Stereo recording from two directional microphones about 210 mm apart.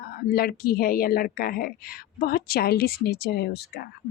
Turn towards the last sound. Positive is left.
turn(degrees=50)  # may be behind; listen again after turning